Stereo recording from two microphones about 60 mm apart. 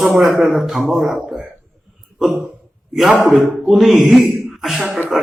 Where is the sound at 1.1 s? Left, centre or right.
Right.